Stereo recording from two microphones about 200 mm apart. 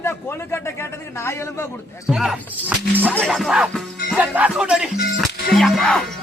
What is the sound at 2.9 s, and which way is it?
Speech, 10° right (ahead or behind).